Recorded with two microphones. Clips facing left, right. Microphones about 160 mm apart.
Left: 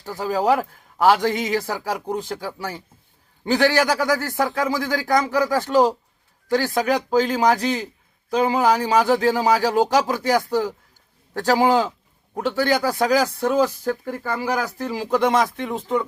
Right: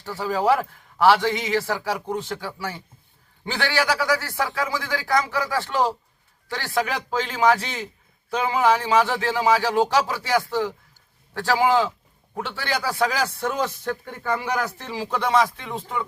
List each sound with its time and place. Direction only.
0.2 s a man's voice: 40° left (ahead or behind)